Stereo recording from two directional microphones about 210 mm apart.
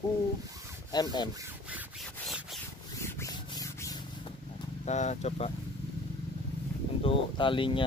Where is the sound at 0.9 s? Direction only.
20° left (ahead or behind).